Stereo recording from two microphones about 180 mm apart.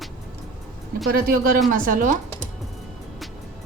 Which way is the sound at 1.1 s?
55° right (ahead or behind).